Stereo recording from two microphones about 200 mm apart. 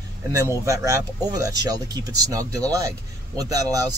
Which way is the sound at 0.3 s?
15° right (ahead or behind).